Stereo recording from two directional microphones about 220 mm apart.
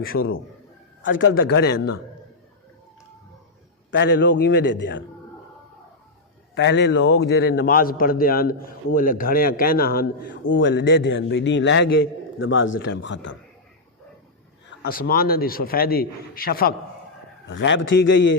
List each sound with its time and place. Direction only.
0.0 s a man's voice: 40° left (ahead or behind)
1.4 s a man's voice: 45° left (ahead or behind)
3.9 s a man's voice: 50° left (ahead or behind)
6.5 s a man's voice: 50° left (ahead or behind)
10.4 s a man's voice: 55° left (ahead or behind)
14.8 s a man's voice: 45° left (ahead or behind)
17.5 s a man's voice: 55° left (ahead or behind)